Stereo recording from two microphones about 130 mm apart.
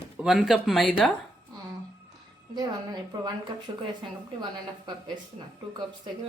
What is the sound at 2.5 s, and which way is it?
A woman's voice, 30° right (ahead or behind).